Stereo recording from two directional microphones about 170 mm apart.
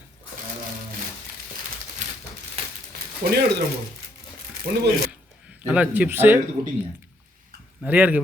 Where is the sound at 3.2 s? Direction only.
50° right (ahead or behind).